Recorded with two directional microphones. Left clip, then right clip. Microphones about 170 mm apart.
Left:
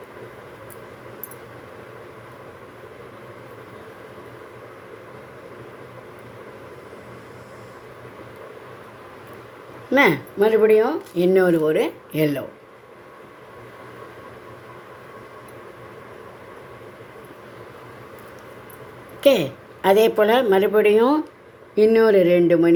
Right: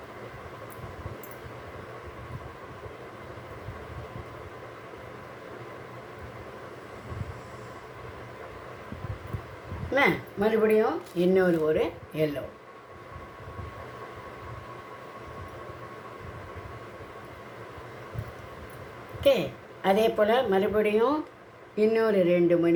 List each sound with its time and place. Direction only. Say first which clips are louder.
9.9 s speech: left 7 dB; 50° left (ahead or behind)
19.2 s speech: left 6 dB; 50° left (ahead or behind)